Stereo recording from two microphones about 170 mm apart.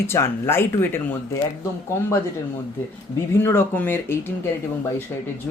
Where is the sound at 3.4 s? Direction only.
15° left (ahead or behind).